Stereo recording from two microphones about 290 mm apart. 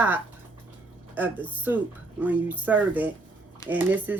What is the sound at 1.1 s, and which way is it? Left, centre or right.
Speech, centre.